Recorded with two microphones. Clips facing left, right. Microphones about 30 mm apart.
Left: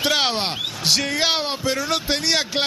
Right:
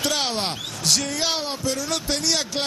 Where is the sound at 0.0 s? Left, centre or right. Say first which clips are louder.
Left 4 dB; left.